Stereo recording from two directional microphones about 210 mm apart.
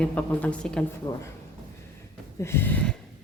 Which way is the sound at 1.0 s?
15° left (ahead or behind).